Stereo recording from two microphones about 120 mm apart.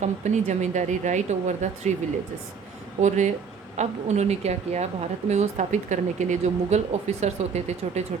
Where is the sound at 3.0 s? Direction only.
70° right (ahead or behind).